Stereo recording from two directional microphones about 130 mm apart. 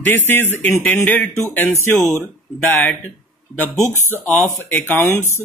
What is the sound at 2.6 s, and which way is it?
Speech, 15° left (ahead or behind).